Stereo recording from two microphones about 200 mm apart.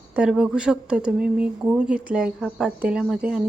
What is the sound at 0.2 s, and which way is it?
A woman's voice, 5° right (ahead or behind).